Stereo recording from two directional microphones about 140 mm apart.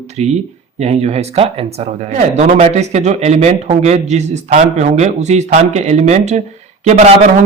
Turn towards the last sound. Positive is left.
turn(degrees=-55)  # may be behind; listen again after turning